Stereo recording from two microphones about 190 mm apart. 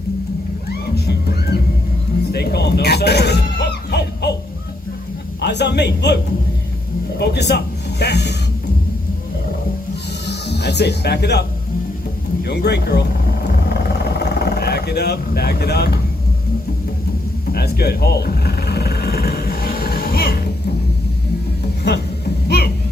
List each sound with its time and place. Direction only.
0.9 s music: 60° left (ahead or behind)
2.3 s a sound: 60° left (ahead or behind)
5.4 s a man's voice: 65° left (ahead or behind)
7.2 s music: 60° left (ahead or behind)
10.2 s music: 60° left (ahead or behind)
12.4 s a man's voice: 60° left (ahead or behind)
13.5 s vehicle: 55° left (ahead or behind)
17.5 s a sound: 55° left (ahead or behind)
22.4 s music: 55° left (ahead or behind)